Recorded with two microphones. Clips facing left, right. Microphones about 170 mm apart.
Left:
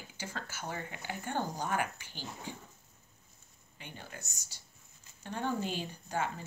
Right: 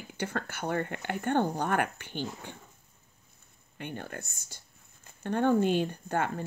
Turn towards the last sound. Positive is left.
turn(degrees=-55)  # may be behind; listen again after turning